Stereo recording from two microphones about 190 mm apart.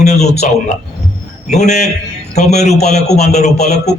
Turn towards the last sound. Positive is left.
turn(degrees=35)  # may be behind; listen again after turning